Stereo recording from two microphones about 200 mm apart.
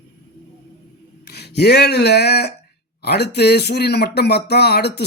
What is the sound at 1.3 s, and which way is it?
Speech, 55° left (ahead or behind).